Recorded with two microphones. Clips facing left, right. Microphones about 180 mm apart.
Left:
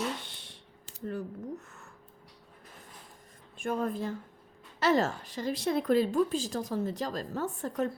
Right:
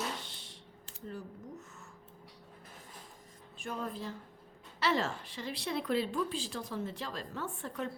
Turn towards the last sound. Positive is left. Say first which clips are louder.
# left 7 dB
turn(degrees=40)  # may be behind; listen again after turning